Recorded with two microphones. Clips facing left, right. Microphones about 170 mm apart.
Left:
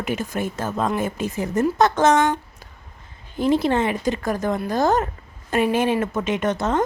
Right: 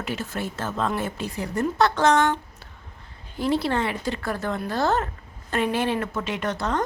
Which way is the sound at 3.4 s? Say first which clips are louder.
Left 4 dB; 20° left (ahead or behind).